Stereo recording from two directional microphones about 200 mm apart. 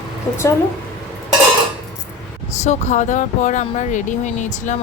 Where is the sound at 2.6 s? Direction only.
35° left (ahead or behind).